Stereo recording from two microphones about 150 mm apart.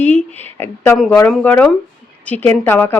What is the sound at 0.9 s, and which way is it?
Speech, centre (ahead or behind).